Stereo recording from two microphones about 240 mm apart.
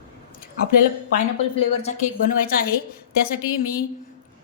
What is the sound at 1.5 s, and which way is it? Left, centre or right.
Speech, left.